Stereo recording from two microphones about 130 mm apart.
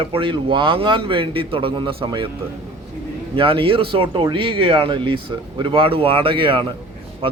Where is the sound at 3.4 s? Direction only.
45° right (ahead or behind).